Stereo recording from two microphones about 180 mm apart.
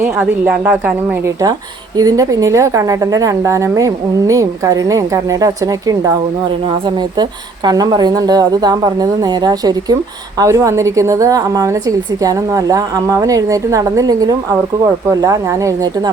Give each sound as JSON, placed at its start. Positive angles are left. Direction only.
{"t": 0.0, "sound": "a woman's voice", "side_deg": -10}
{"t": 2.0, "sound": "a woman's voice", "side_deg": -20}
{"t": 6.8, "sound": "a woman's voice", "side_deg": -25}